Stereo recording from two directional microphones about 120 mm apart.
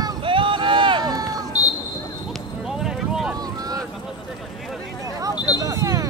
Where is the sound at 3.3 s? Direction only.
30° right (ahead or behind).